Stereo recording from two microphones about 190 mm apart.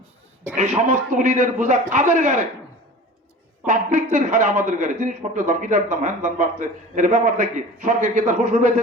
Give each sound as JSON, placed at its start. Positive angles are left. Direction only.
{"t": 0.5, "sound": "a man's voice", "side_deg": -40}
{"t": 3.7, "sound": "a man's voice", "side_deg": -40}